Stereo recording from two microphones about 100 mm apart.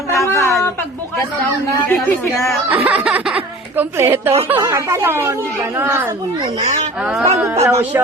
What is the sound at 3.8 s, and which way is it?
Speech, 25° right (ahead or behind).